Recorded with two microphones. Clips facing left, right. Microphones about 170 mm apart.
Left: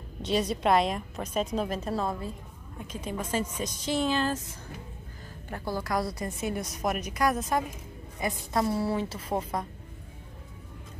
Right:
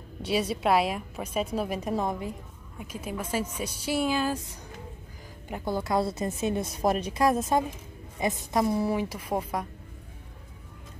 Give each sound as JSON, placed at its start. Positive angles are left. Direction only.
{"t": 0.2, "sound": "a woman's voice", "side_deg": -5}
{"t": 5.5, "sound": "a woman's voice", "side_deg": -20}